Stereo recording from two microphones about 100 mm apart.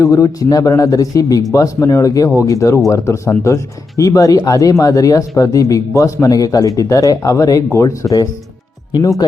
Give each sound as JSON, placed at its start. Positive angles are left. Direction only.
{"t": 0.0, "sound": "speech", "side_deg": 35}